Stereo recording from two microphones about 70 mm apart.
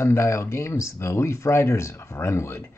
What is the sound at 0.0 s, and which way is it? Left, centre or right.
Speech, left.